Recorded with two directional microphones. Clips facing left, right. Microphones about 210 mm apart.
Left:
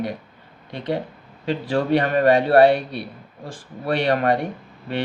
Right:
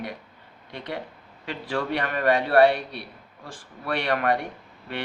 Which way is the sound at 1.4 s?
30° left (ahead or behind).